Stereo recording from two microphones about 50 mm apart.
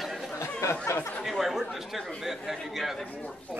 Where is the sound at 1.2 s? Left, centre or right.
Centre.